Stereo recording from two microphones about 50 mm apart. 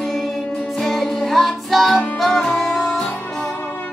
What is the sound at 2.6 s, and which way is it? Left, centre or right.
Music, left.